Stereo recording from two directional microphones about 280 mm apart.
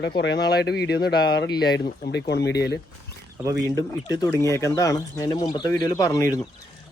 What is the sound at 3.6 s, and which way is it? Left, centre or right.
Speech, centre.